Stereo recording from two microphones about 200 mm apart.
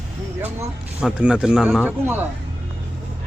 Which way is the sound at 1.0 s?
5° right (ahead or behind).